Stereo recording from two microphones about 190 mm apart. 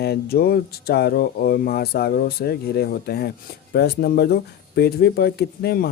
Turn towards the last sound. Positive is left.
turn(degrees=55)  # may be behind; listen again after turning